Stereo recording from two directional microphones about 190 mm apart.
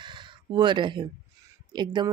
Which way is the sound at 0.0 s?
25° right (ahead or behind).